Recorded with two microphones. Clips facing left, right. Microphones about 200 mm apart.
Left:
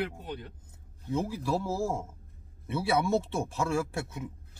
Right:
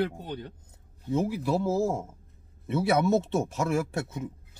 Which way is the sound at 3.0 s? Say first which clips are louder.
Right 4 dB; 20° right (ahead or behind).